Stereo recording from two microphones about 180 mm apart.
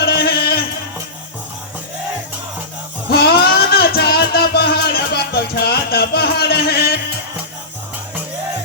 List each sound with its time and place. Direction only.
0.0 s music: 60° left (ahead or behind)
3.1 s music: 60° left (ahead or behind)